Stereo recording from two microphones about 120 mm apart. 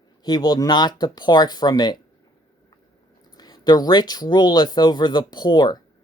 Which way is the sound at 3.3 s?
35° left (ahead or behind).